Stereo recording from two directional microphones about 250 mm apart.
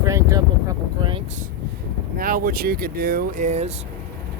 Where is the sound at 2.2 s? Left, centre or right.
Right.